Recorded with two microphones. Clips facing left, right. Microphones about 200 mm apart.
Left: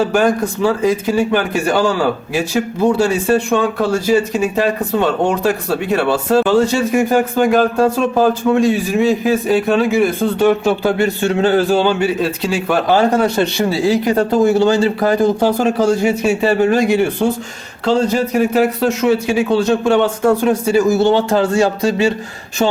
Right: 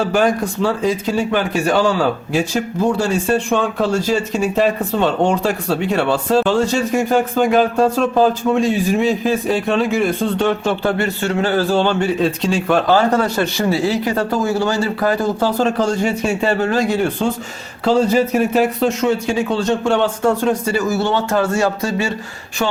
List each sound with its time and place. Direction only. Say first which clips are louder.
0.0 s speech: left 2 dB; centre (ahead or behind)
3.0 s speech: left 3 dB; 5° left (ahead or behind)
12.9 s speech: left 4 dB; 20° left (ahead or behind)
17.8 s speech: right 1 dB; 5° right (ahead or behind); by 22.1 s 15° left (ahead or behind)